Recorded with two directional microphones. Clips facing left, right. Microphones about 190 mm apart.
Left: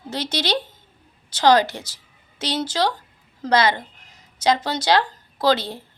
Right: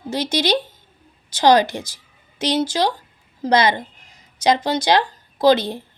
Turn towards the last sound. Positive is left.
turn(degrees=-15)  # may be behind; listen again after turning